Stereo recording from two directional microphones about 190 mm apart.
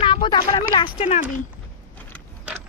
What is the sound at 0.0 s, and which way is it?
Speech, 25° left (ahead or behind).